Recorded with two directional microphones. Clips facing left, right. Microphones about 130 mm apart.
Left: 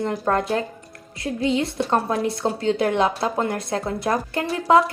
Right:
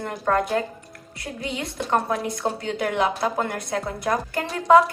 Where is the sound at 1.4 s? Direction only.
25° left (ahead or behind).